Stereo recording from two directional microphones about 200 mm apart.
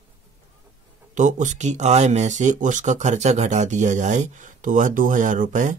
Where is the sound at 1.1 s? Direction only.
40° right (ahead or behind).